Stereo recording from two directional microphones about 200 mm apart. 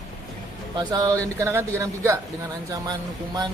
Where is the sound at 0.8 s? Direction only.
20° right (ahead or behind).